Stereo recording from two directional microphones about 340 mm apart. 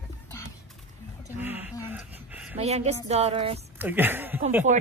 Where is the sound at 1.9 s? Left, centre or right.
Centre.